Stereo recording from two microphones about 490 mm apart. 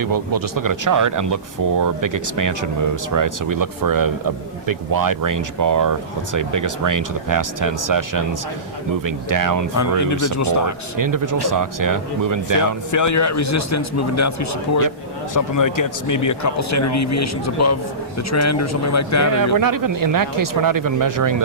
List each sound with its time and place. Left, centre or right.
0.0 s speech: right
9.7 s a man's voice: left
10.9 s speech: right
12.9 s a man's voice: left
19.5 s speech: right